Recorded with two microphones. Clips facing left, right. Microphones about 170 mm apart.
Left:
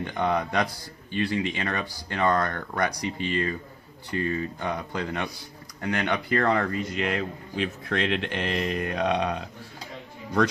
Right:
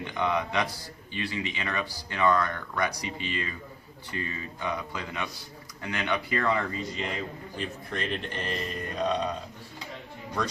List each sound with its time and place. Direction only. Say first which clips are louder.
0.0 s speech: left 3 dB; 50° left (ahead or behind); by 9.4 s 70° left (ahead or behind)